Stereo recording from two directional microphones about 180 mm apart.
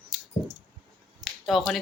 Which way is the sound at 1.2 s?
Centre (ahead or behind).